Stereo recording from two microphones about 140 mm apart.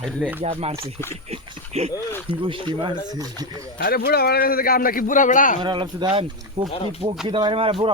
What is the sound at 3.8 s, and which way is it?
A man's voice, 90° left.